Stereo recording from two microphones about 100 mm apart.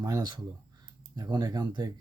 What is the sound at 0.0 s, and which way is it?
Speech, 40° right (ahead or behind).